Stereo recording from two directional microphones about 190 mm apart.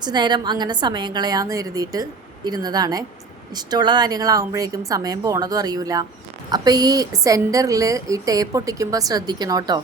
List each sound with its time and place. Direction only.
0.0 s a woman's voice: 20° right (ahead or behind)